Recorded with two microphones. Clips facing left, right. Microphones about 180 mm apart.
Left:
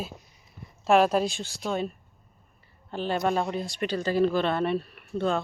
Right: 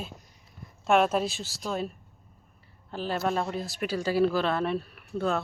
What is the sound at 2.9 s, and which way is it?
Speech, centre (ahead or behind).